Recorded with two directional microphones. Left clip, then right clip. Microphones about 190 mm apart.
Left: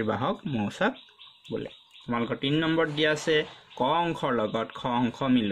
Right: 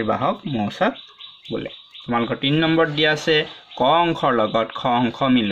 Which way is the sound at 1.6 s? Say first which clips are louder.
Right 7 dB; 20° left (ahead or behind).